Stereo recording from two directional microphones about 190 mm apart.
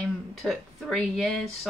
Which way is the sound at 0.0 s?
Centre (ahead or behind).